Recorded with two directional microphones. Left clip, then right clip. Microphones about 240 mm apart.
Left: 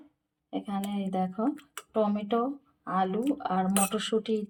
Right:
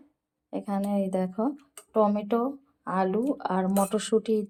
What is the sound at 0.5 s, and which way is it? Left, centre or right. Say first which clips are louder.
Speech: right 4 dB; right.